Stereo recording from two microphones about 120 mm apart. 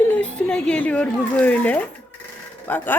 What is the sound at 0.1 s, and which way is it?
Speech, 10° left (ahead or behind).